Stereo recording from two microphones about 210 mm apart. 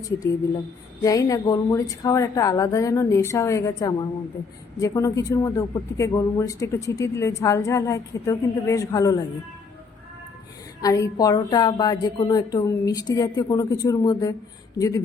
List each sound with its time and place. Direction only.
1.0 s speech: 15° left (ahead or behind)
10.8 s speech: 15° left (ahead or behind)